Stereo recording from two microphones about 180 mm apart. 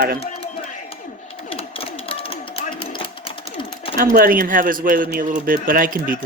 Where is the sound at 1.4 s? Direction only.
30° left (ahead or behind).